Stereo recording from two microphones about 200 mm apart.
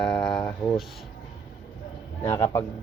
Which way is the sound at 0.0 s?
5° left (ahead or behind).